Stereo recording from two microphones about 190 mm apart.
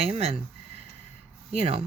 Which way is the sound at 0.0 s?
30° right (ahead or behind).